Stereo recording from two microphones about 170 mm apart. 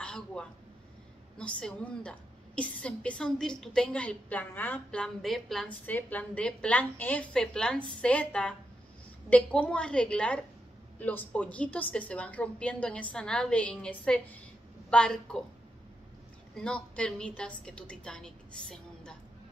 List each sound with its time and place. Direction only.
0.0 s a woman's voice: 5° left (ahead or behind)
16.5 s a woman's voice: 5° left (ahead or behind)